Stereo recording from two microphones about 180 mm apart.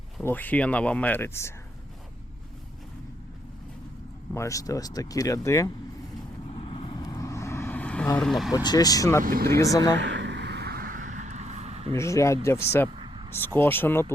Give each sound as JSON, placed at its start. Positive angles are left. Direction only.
{"t": 0.2, "sound": "speech", "side_deg": 10}
{"t": 4.4, "sound": "speech", "side_deg": 20}
{"t": 6.5, "sound": "vehicle", "side_deg": 30}
{"t": 8.5, "sound": "speech", "side_deg": 20}
{"t": 9.2, "sound": "speech", "side_deg": -55}
{"t": 9.6, "sound": "speech", "side_deg": 20}
{"t": 9.9, "sound": "a sound", "side_deg": -85}
{"t": 11.9, "sound": "speech", "side_deg": 15}